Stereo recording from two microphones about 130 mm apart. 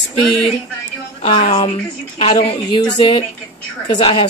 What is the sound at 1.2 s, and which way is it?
Speech, 45° left (ahead or behind).